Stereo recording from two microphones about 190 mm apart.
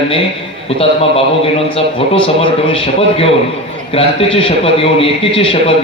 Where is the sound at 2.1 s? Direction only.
30° left (ahead or behind).